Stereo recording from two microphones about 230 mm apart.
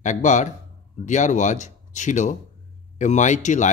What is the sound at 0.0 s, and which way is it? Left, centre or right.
A man's voice, left.